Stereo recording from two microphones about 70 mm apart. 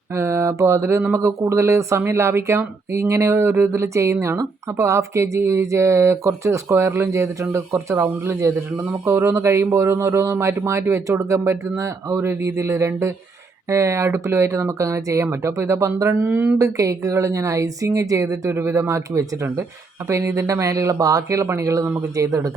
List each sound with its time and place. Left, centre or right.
0.1 s a sound: right
1.1 s speech: right
16.2 s speech: right
16.6 s speech: right